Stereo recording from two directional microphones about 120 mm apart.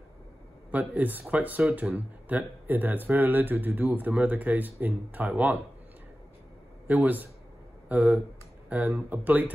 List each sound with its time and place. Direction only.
0.7 s speech: 15° right (ahead or behind)
6.9 s speech: 15° right (ahead or behind)